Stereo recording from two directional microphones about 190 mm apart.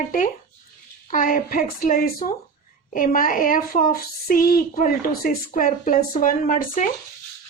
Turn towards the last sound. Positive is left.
turn(degrees=45)  # may be behind; listen again after turning